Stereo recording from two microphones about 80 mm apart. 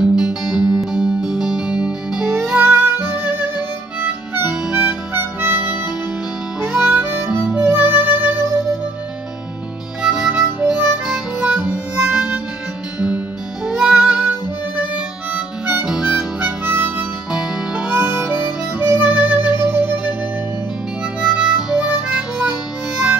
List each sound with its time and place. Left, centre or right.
0.0 s music: centre; by 3.4 s right
5.1 s harmonica: right
6.7 s harmonica: right
7.7 s music: right
10.0 s harmonica: centre
13.7 s music: centre
15.3 s harmonica: centre
16.6 s harmonica: right
17.3 s harmonica: centre
18.8 s music: right
21.2 s harmonica: centre